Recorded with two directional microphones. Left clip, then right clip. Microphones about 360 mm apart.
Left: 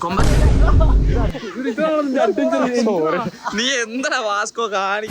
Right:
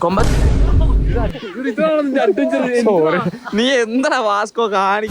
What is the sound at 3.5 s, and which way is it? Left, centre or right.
Speech, centre.